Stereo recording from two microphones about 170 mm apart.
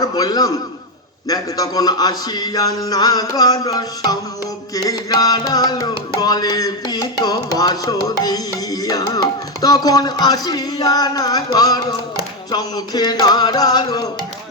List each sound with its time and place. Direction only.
0.0 s a man's voice: 25° left (ahead or behind)
1.3 s carnatic music: 20° left (ahead or behind)